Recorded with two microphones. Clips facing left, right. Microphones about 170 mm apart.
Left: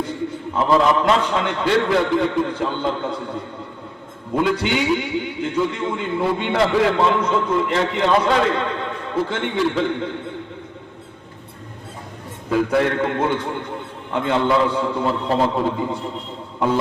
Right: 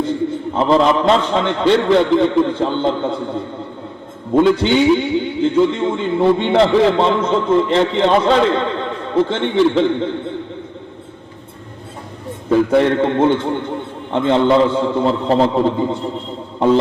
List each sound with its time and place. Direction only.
0.5 s a man's voice: 25° right (ahead or behind)
4.4 s a man's voice: 25° right (ahead or behind)
12.5 s a man's voice: 25° right (ahead or behind)